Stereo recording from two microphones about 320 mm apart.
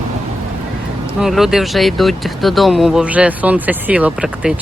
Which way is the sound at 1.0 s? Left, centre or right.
Centre.